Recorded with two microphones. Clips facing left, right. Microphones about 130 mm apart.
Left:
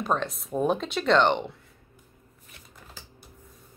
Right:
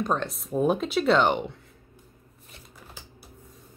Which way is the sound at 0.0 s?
Centre (ahead or behind).